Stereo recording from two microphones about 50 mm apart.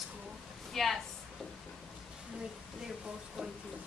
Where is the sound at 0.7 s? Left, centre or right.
Centre.